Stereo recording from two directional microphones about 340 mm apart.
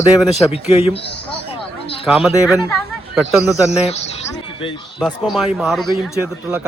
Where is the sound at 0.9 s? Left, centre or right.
Left.